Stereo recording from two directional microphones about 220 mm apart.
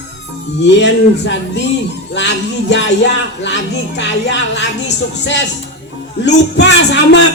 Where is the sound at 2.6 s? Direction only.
55° left (ahead or behind).